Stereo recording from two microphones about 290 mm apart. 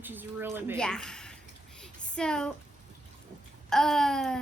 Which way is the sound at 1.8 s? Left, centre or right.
Centre.